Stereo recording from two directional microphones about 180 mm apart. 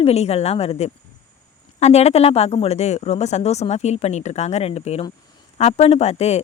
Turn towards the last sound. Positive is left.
turn(degrees=35)  # may be behind; listen again after turning